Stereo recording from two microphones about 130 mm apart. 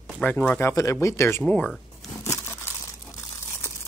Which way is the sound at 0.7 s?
25° left (ahead or behind).